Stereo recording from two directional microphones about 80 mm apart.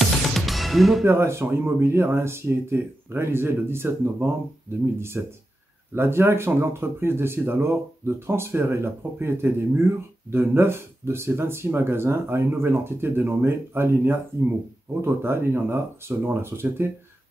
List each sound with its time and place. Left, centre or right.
0.0 s music: centre
1.0 s speech: right